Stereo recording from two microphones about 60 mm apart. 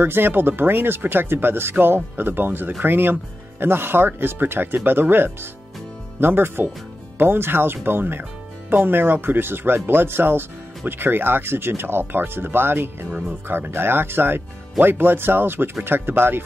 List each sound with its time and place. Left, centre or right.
0.0 s speech: right